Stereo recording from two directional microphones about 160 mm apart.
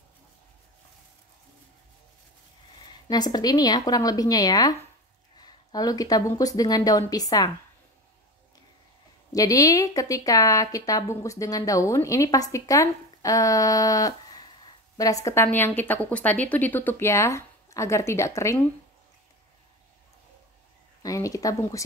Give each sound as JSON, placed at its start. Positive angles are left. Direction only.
{"t": 3.1, "sound": "speech", "side_deg": 25}
{"t": 9.3, "sound": "a woman's voice", "side_deg": 20}
{"t": 21.0, "sound": "speech", "side_deg": 20}